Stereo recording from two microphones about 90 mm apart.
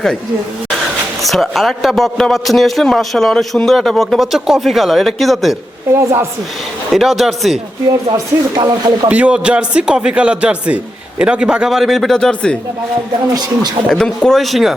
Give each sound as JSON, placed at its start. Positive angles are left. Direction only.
{"t": 1.2, "sound": "a man's voice", "side_deg": 0}
{"t": 5.9, "sound": "a woman's voice", "side_deg": -30}
{"t": 6.9, "sound": "a man's voice", "side_deg": 0}
{"t": 7.9, "sound": "speech", "side_deg": -45}
{"t": 9.0, "sound": "a man's voice", "side_deg": -15}
{"t": 13.3, "sound": "speech", "side_deg": -50}
{"t": 13.8, "sound": "a man's voice", "side_deg": 5}